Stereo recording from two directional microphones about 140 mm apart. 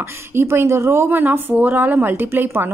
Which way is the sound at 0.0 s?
20° right (ahead or behind).